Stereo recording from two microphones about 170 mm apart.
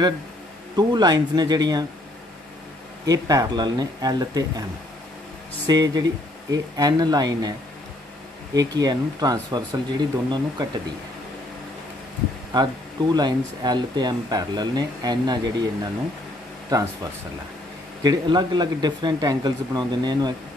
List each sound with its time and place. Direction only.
0.7 s speech: 25° right (ahead or behind)
3.1 s speech: 20° right (ahead or behind)
5.7 s speech: 25° right (ahead or behind)
8.5 s speech: 20° right (ahead or behind)
13.1 s speech: 25° right (ahead or behind)
18.0 s speech: 25° right (ahead or behind)